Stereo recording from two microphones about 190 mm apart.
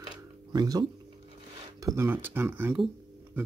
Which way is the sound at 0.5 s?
20° right (ahead or behind).